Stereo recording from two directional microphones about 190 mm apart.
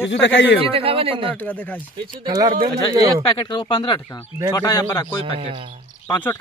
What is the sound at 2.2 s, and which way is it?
Speech, 25° right (ahead or behind).